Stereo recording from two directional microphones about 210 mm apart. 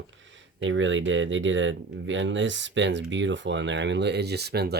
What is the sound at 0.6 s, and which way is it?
Speech, 65° right (ahead or behind).